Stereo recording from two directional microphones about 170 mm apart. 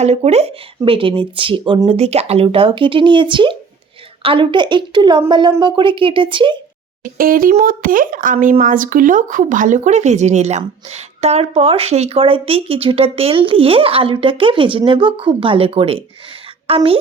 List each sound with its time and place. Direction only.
0.0 s speech: 40° right (ahead or behind)
7.2 s a child's voice: 55° right (ahead or behind); by 17.0 s 35° right (ahead or behind)